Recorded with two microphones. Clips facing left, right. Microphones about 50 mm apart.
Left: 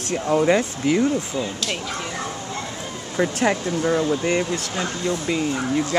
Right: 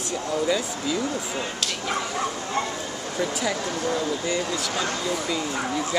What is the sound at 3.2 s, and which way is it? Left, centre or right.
Speech, left.